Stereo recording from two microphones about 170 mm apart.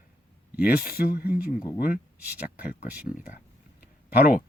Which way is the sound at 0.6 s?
60° left (ahead or behind).